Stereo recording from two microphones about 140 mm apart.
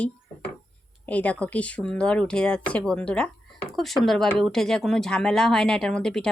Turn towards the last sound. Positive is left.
turn(degrees=5)  # may be behind; listen again after turning